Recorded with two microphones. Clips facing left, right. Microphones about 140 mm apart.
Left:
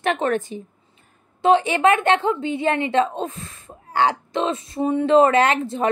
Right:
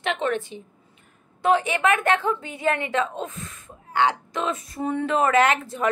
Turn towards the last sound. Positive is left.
turn(degrees=30)  # may be behind; listen again after turning